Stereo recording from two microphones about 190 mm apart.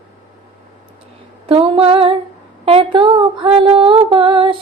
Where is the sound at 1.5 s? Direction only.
30° right (ahead or behind).